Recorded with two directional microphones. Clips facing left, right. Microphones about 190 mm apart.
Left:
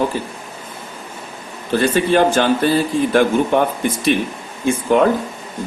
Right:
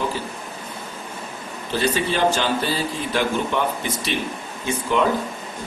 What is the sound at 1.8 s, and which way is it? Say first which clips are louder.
Speech: left 6 dB; 50° left (ahead or behind).